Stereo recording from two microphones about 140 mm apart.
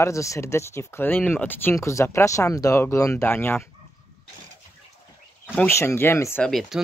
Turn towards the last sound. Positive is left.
turn(degrees=5)  # may be behind; listen again after turning